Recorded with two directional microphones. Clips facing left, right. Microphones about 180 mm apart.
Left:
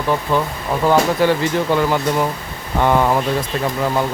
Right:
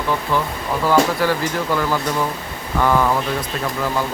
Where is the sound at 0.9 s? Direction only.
20° left (ahead or behind).